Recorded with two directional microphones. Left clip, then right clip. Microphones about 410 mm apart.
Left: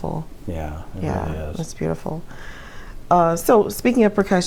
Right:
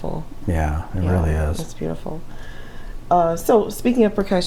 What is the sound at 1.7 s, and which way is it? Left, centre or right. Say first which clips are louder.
Speech: left 2 dB; left.